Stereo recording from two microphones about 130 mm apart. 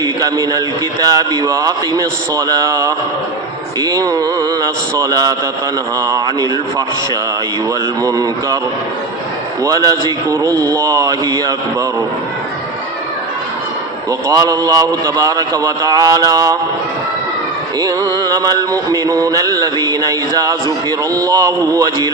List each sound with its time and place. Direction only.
0.0 s a man's voice: 30° right (ahead or behind)
1.0 s music: 30° right (ahead or behind)
8.0 s music: 25° right (ahead or behind)
9.6 s music: 30° right (ahead or behind)
14.1 s music: 25° right (ahead or behind)
17.7 s music: 30° right (ahead or behind)